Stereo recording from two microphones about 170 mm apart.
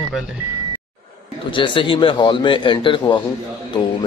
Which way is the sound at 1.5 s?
30° left (ahead or behind).